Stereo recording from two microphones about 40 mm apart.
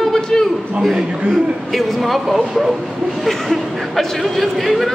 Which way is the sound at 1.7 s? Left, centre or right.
Centre.